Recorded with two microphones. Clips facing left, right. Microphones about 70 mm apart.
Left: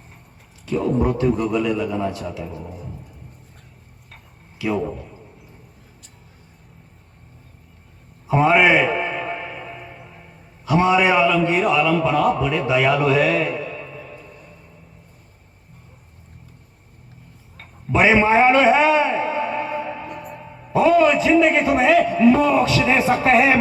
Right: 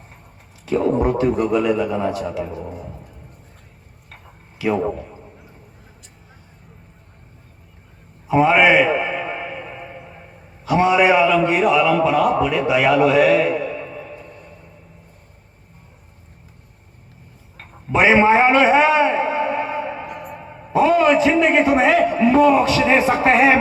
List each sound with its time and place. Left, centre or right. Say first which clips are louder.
0.8 s a man's voice: right 2 dB; right
4.6 s a man's voice: right 3 dB; right
8.3 s a sound: right 1 dB; centre
10.7 s a man's voice: right 2 dB; right
17.9 s a sound: right 2 dB; right
20.2 s a man's voice: right 2 dB; right